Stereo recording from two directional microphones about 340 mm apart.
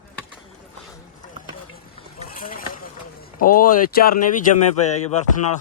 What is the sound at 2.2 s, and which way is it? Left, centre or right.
Vehicle, left.